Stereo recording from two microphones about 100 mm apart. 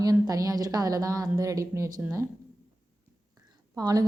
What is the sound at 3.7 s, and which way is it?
Speech, 40° right (ahead or behind).